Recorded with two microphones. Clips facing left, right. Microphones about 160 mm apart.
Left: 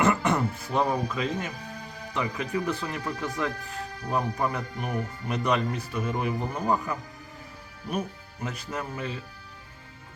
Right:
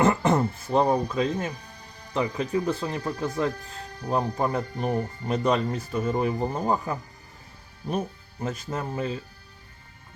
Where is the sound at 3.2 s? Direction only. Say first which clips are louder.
Right 4 dB; 30° right (ahead or behind).